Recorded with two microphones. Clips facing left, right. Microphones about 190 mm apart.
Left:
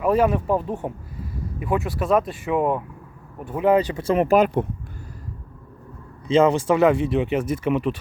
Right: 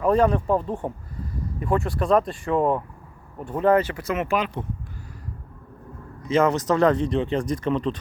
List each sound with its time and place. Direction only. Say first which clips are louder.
0.0 s speech: even; 5° left (ahead or behind)
4.0 s speech: left 7 dB; 35° left (ahead or behind)
6.2 s speech: left 3 dB; 25° left (ahead or behind)
6.7 s speech: left 2 dB; 10° left (ahead or behind)